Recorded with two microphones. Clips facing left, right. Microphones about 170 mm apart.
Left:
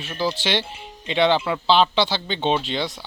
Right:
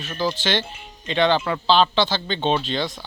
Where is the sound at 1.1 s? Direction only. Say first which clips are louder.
Even; 20° left (ahead or behind).